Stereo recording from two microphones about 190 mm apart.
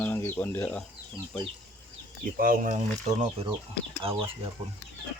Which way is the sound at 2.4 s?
45° right (ahead or behind).